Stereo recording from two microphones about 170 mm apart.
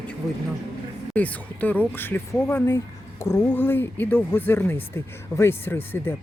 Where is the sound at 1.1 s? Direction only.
10° left (ahead or behind).